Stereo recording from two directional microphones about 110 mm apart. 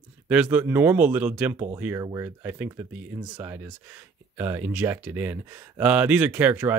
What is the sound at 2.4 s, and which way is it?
Speech, 15° right (ahead or behind).